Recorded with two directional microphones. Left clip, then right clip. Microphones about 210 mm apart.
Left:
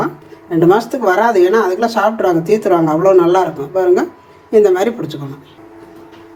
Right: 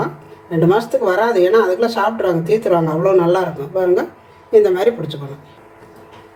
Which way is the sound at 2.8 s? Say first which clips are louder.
Left 4 dB; 25° left (ahead or behind).